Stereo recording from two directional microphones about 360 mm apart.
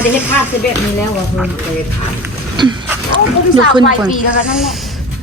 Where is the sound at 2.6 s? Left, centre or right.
Centre.